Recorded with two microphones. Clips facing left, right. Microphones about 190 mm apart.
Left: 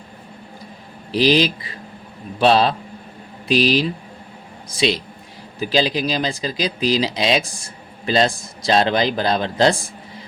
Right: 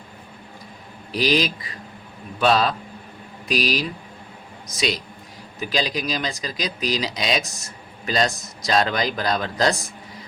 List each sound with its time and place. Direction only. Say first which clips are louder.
1.1 s speech: left 5 dB; 30° left (ahead or behind)